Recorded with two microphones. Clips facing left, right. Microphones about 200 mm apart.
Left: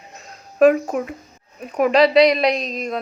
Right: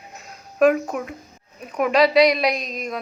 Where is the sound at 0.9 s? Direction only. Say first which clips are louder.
Left 4 dB; 40° left (ahead or behind).